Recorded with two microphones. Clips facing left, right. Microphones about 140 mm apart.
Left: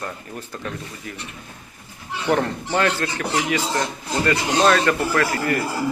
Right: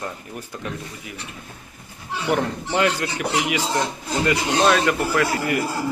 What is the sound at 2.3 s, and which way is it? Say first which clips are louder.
Speech: left 2 dB; 10° right (ahead or behind).